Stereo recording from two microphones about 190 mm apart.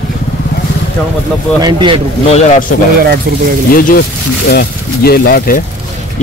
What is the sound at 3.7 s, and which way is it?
Speech, 50° left (ahead or behind).